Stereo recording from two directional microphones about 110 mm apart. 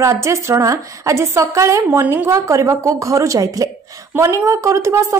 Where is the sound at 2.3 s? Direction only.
30° right (ahead or behind).